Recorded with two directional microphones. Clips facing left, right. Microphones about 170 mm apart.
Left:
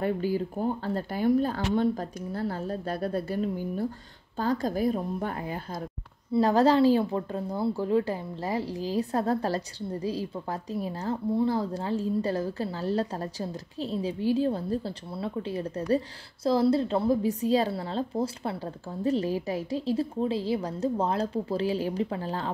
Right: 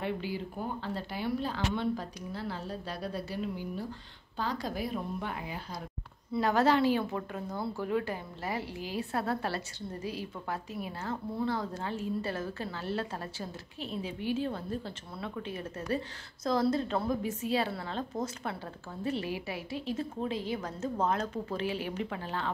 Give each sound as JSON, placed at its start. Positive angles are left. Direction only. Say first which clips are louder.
{"t": 0.0, "sound": "speech", "louder": "left 7 dB", "side_deg": 45}
{"t": 6.3, "sound": "a woman's voice", "louder": "left 5 dB", "side_deg": 35}